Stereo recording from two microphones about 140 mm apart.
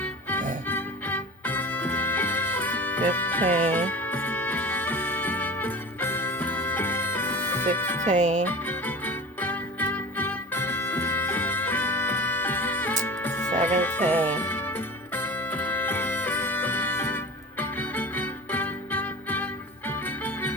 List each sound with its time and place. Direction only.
0.0 s music: 15° left (ahead or behind)
8.0 s speech: 60° right (ahead or behind)
8.4 s music: 15° left (ahead or behind)